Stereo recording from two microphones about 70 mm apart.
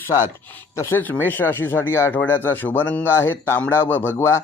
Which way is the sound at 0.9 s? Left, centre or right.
Left.